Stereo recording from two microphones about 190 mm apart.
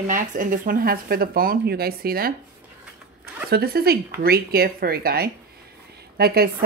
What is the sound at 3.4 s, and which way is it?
A woman's voice, 55° right (ahead or behind).